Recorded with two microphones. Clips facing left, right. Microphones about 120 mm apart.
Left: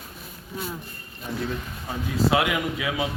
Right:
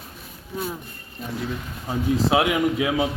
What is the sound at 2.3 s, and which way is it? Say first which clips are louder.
Speech: right 4 dB; 25° right (ahead or behind).